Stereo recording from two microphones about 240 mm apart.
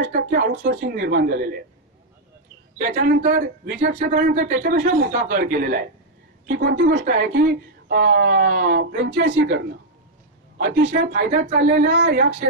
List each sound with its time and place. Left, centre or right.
0.0 s speech: right
2.8 s a woman's voice: right
10.6 s speech: right